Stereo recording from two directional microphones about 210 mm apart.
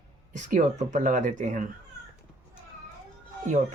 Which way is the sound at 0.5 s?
35° right (ahead or behind).